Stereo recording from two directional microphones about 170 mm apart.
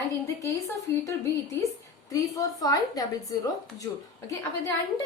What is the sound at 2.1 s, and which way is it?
Speech, 20° left (ahead or behind).